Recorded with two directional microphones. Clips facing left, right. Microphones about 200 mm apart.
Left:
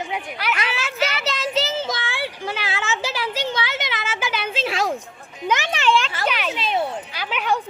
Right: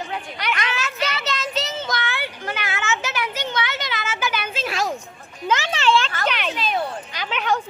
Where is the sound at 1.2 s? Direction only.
30° left (ahead or behind).